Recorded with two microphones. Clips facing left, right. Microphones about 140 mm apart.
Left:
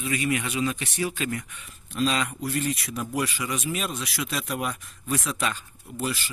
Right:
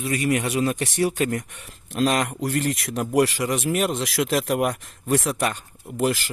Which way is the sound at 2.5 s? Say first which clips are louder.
Right 3 dB; 80° right.